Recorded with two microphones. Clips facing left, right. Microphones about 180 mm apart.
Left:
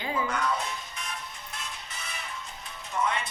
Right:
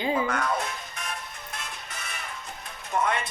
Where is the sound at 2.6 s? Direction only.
55° right (ahead or behind).